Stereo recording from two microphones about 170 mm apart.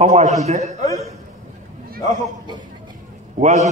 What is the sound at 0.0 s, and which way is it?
Speech, 40° right (ahead or behind).